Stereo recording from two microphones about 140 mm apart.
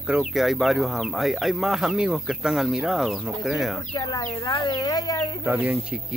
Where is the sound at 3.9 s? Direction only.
25° left (ahead or behind).